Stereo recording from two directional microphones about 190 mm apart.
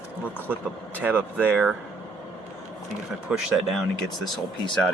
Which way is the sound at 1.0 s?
5° right (ahead or behind).